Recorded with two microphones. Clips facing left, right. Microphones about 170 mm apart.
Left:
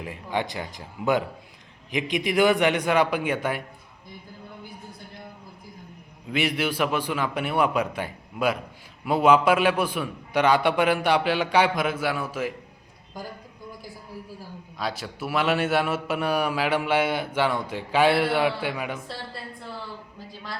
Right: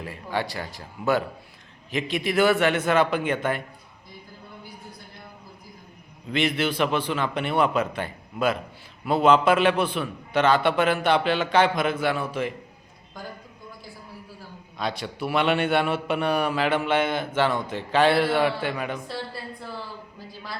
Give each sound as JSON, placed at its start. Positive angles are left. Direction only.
{"t": 0.0, "sound": "a man's voice", "side_deg": 15}
{"t": 6.3, "sound": "a man's voice", "side_deg": 10}
{"t": 14.8, "sound": "a man's voice", "side_deg": 5}